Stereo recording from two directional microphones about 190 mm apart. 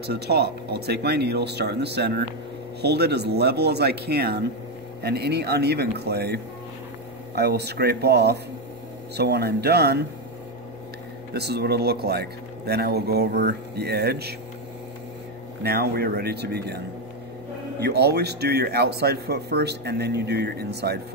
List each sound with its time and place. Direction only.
0.0 s speech: 60° right (ahead or behind)
11.3 s speech: 60° right (ahead or behind)
15.6 s speech: 55° right (ahead or behind)